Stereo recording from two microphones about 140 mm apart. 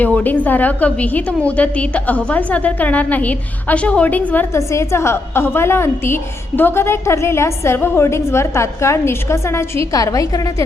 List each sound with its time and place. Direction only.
0.0 s a woman's voice: 10° left (ahead or behind)